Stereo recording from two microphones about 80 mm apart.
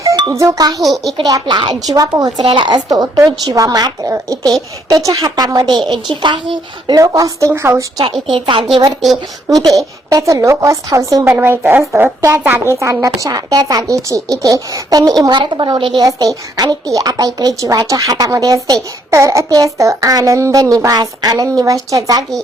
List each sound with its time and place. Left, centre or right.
0.3 s a woman's voice: right
0.8 s a woman's voice: centre
1.5 s a woman's voice: right
1.9 s a woman's voice: right
2.6 s a woman's voice: right
5.5 s a woman's voice: right
6.9 s a woman's voice: right
8.3 s a woman's voice: right
9.0 s a woman's voice: centre
9.6 s a woman's voice: right
11.3 s a woman's voice: right
12.7 s a woman's voice: right
16.0 s a woman's voice: right